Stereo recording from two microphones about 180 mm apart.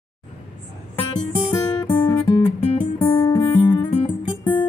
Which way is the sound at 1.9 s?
25° left (ahead or behind).